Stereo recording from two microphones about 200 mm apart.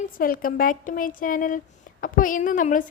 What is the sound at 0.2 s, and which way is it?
A woman's voice, 45° left (ahead or behind).